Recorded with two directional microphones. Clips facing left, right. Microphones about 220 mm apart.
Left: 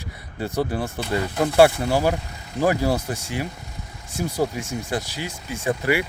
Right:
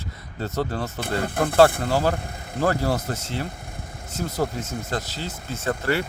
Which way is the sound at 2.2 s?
55° right (ahead or behind).